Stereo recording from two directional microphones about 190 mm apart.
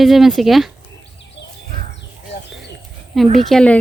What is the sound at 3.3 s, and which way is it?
Speech, centre (ahead or behind).